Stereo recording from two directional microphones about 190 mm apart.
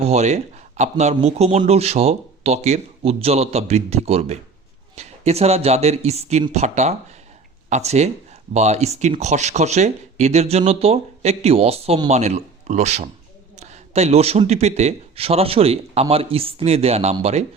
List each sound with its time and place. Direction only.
0.0 s speech: 35° right (ahead or behind)